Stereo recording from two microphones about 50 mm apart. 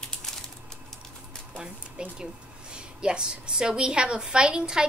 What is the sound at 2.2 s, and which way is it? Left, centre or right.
A woman's voice, centre.